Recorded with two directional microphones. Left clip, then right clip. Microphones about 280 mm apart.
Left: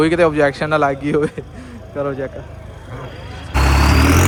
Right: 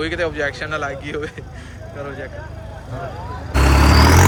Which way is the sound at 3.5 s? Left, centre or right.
Centre.